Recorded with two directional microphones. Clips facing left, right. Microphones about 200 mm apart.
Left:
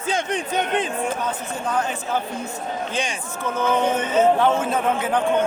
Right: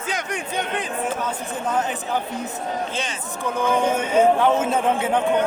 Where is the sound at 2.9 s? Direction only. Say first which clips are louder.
Left 2 dB; 15° left (ahead or behind).